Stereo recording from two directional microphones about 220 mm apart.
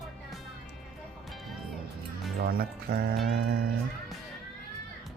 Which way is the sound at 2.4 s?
45° right (ahead or behind).